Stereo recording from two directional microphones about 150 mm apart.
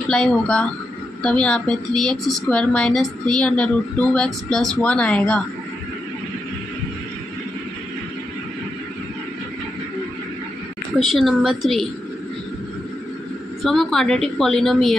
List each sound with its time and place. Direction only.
0.1 s a woman's voice: 5° left (ahead or behind)
11.0 s a woman's voice: centre (ahead or behind)
13.7 s a woman's voice: centre (ahead or behind)